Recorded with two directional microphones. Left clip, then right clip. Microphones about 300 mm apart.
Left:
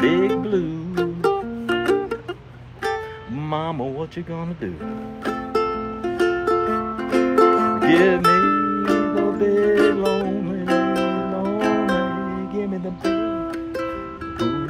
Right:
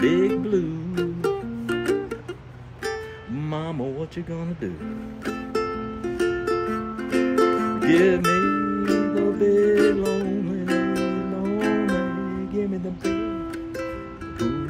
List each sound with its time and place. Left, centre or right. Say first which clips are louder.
0.0 s music: left 2 dB; centre
3.4 s music: left 5 dB; centre
6.0 s music: left 4 dB; centre
7.8 s music: left 1 dB; centre